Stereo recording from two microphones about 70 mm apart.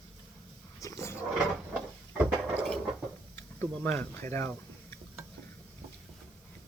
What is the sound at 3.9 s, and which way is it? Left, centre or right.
Speech, left.